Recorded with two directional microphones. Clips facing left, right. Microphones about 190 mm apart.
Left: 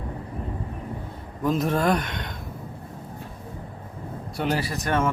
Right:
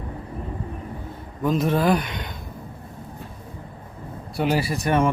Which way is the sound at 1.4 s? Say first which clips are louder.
Right 2 dB; centre (ahead or behind).